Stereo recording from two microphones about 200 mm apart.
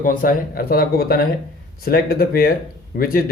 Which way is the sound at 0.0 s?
45° left (ahead or behind).